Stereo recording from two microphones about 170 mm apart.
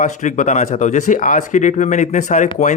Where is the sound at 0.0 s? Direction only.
45° left (ahead or behind).